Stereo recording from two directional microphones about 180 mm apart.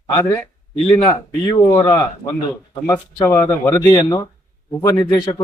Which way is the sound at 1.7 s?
20° left (ahead or behind).